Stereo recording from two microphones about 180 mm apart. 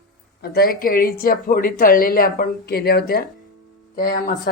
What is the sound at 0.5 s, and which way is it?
A woman's voice, 55° left (ahead or behind).